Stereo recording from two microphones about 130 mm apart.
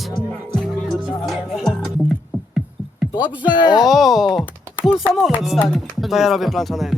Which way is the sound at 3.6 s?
35° left (ahead or behind).